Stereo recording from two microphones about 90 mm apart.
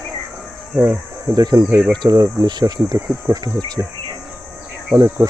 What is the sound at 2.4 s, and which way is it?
Speech, 50° right (ahead or behind).